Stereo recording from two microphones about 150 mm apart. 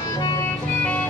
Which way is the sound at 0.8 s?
10° left (ahead or behind).